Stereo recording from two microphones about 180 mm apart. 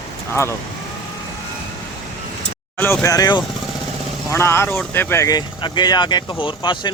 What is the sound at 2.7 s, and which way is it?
Speech, 10° left (ahead or behind).